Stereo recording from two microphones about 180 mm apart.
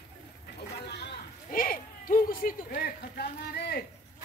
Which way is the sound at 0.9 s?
60° left (ahead or behind).